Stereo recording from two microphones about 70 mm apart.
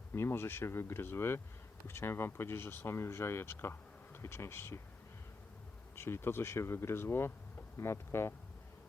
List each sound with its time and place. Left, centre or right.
0.1 s speech: left
6.0 s speech: left